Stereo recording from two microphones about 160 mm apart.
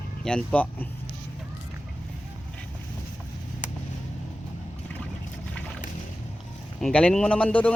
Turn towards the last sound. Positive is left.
turn(degrees=10)  # may be behind; listen again after turning